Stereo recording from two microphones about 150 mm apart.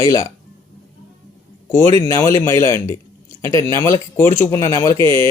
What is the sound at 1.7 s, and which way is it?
Speech, 20° left (ahead or behind).